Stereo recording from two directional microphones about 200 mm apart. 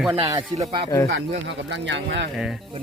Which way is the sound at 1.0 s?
55° right (ahead or behind).